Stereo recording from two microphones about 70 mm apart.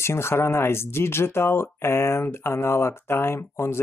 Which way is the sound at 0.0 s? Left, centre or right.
Left.